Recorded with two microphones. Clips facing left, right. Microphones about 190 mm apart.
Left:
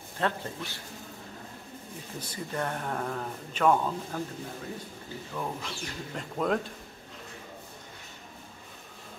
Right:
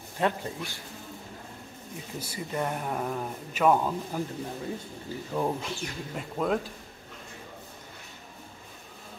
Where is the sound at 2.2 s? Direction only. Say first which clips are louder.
Right 2 dB; 10° right (ahead or behind).